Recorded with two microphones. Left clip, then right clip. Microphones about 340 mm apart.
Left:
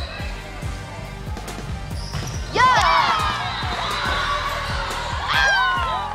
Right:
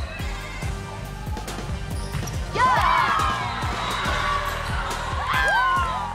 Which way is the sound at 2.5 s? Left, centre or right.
Left.